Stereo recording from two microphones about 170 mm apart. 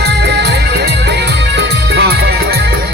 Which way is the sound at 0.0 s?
80° right.